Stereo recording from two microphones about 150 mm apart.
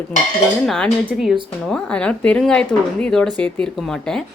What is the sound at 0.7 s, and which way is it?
Speech, centre (ahead or behind).